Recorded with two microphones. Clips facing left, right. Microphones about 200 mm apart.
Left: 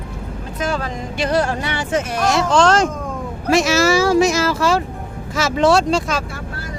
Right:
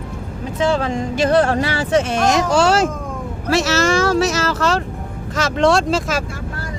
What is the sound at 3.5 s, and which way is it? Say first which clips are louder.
Speech: left 2 dB; 10° left (ahead or behind).